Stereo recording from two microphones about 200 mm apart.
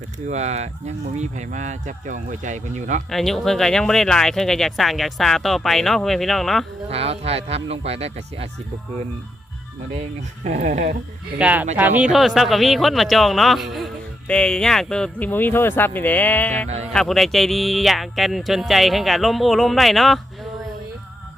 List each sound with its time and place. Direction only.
0.3 s speech: 35° right (ahead or behind)
3.1 s speech: centre (ahead or behind)
6.9 s speech: 30° right (ahead or behind)
9.9 s speech: 35° right (ahead or behind)
11.3 s speech: 5° right (ahead or behind)
16.6 s speech: 35° right (ahead or behind)
16.9 s speech: centre (ahead or behind)